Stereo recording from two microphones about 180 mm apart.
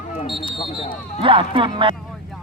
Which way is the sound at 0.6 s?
25° left (ahead or behind).